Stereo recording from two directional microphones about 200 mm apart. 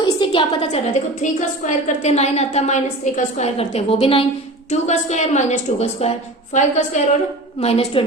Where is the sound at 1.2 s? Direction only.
35° left (ahead or behind).